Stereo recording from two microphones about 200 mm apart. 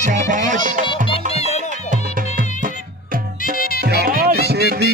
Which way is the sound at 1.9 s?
40° right (ahead or behind).